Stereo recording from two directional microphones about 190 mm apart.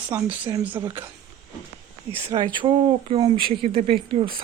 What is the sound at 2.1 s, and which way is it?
Speech, 10° right (ahead or behind).